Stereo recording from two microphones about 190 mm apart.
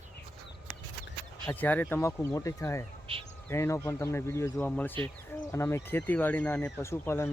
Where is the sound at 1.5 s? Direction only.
10° left (ahead or behind).